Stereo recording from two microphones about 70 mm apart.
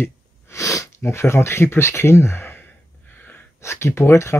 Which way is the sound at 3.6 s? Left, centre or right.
Left.